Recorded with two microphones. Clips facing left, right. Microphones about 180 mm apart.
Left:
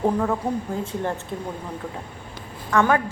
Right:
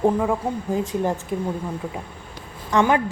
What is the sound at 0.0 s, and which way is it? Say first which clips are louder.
Speech: right 2 dB; 10° right (ahead or behind).